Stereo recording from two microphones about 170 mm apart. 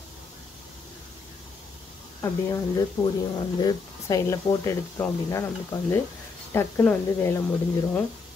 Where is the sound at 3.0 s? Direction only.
20° left (ahead or behind).